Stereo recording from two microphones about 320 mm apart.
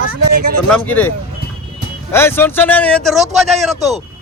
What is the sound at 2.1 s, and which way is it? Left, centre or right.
A man's voice, centre.